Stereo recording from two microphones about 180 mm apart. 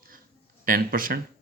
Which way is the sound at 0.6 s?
50° right (ahead or behind).